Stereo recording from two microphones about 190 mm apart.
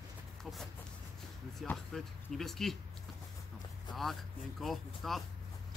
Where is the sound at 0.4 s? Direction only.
Centre (ahead or behind).